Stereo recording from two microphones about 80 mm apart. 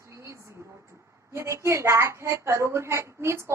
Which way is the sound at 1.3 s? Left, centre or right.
Right.